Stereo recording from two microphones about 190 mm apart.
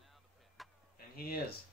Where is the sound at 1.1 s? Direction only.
50° left (ahead or behind).